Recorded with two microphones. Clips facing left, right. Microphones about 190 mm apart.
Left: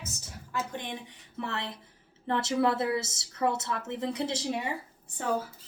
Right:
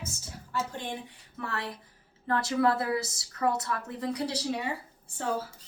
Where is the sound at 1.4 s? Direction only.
25° left (ahead or behind).